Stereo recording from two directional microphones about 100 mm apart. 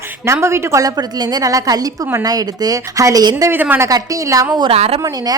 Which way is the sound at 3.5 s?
20° right (ahead or behind).